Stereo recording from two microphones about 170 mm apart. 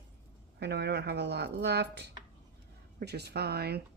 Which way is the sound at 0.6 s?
75° right (ahead or behind).